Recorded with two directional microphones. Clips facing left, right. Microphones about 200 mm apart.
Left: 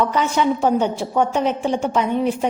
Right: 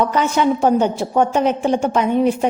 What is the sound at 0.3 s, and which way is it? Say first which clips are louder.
A woman's voice: right 3 dB; 45° right (ahead or behind).